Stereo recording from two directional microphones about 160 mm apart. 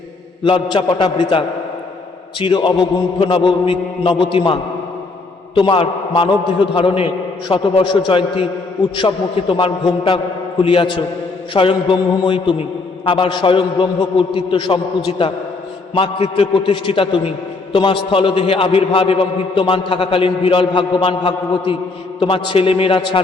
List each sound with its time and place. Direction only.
0.4 s a man's voice: 30° left (ahead or behind)
5.5 s a man's voice: 30° left (ahead or behind)